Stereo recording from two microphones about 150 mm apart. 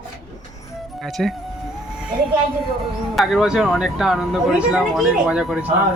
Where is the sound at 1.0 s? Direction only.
Centre (ahead or behind).